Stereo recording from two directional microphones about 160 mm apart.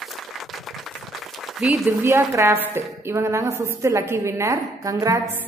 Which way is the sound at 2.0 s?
15° right (ahead or behind).